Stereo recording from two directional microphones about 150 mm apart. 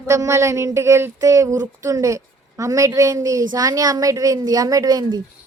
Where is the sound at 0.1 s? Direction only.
20° right (ahead or behind).